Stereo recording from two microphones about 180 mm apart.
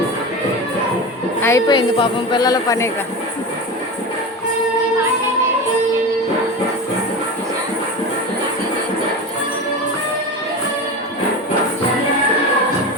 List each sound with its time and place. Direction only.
1.4 s jingle bell: 15° left (ahead or behind)
1.6 s a woman's voice: 25° left (ahead or behind)